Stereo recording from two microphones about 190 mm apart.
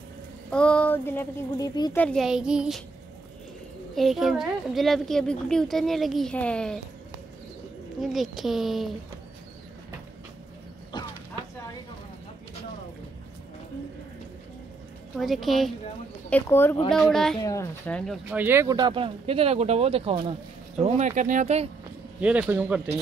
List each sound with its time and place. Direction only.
0.5 s speech: 5° left (ahead or behind)
2.0 s a woman's voice: 5° left (ahead or behind)
3.9 s a woman's voice: centre (ahead or behind)
8.0 s a woman's voice: centre (ahead or behind)
15.1 s a woman's voice: centre (ahead or behind)
17.4 s speech: 15° left (ahead or behind)
18.4 s speech: 15° right (ahead or behind); by 20.3 s 30° right (ahead or behind)
20.8 s speech: 40° right (ahead or behind)
22.2 s speech: 5° right (ahead or behind)